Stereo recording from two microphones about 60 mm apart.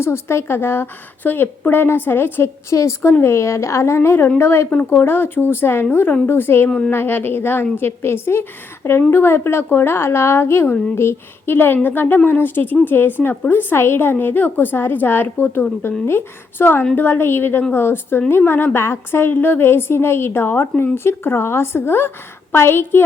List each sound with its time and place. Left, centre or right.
0.0 s a woman's voice: left
2.7 s a woman's voice: left
6.7 s a woman's voice: centre
6.9 s a woman's voice: left